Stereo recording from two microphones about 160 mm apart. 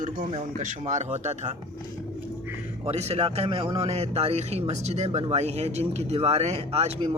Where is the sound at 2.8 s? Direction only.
40° right (ahead or behind).